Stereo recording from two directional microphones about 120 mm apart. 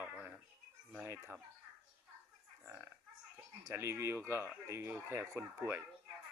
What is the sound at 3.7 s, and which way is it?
Speech, 20° right (ahead or behind).